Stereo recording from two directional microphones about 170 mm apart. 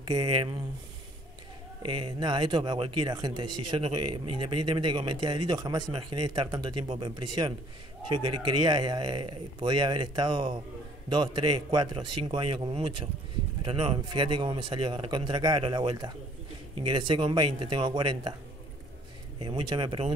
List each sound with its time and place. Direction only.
0.1 s speech: 30° right (ahead or behind)
1.9 s speech: 30° right (ahead or behind)
19.4 s speech: 30° right (ahead or behind)